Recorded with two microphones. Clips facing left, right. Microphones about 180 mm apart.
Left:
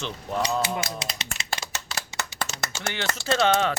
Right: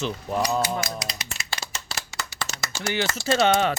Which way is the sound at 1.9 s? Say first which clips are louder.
Left 1 dB; 35° right (ahead or behind).